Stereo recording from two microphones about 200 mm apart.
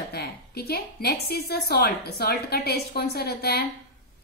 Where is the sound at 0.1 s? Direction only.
50° left (ahead or behind).